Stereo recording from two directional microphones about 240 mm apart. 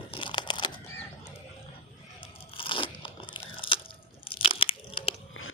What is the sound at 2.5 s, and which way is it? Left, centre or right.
Crunch, left.